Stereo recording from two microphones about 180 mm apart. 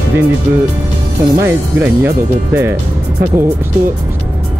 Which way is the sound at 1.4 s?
10° right (ahead or behind).